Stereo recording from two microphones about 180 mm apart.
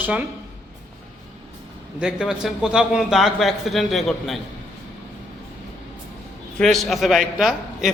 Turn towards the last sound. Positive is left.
turn(degrees=0)  # may be behind; listen again after turning